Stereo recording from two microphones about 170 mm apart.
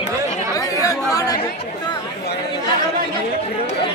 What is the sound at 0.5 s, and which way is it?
Chatter, 20° left (ahead or behind).